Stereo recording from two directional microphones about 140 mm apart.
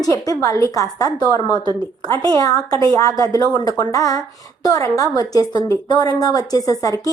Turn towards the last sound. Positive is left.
turn(degrees=25)  # may be behind; listen again after turning